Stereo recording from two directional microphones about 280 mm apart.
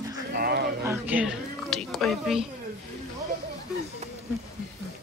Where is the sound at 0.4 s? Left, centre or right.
Right.